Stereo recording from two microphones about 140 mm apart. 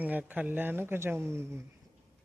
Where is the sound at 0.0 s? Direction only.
10° right (ahead or behind).